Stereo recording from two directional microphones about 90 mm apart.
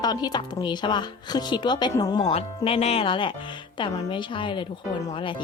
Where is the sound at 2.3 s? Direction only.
90° left.